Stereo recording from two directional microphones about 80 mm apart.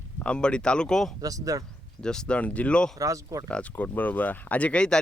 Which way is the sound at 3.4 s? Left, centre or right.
Centre.